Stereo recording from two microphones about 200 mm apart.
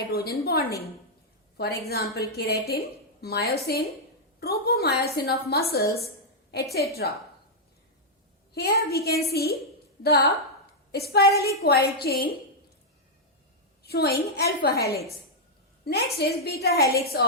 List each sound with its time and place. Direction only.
0.1 s a woman's voice: 50° left (ahead or behind)
1.9 s a woman's voice: 50° left (ahead or behind)
6.7 s a woman's voice: 50° left (ahead or behind)
8.5 s a woman's voice: 50° left (ahead or behind)
13.8 s a woman's voice: 50° left (ahead or behind)